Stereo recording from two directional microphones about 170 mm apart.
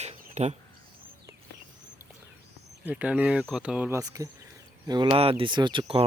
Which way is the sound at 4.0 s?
20° right (ahead or behind).